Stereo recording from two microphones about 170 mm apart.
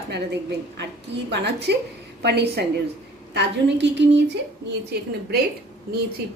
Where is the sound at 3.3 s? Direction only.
90° right.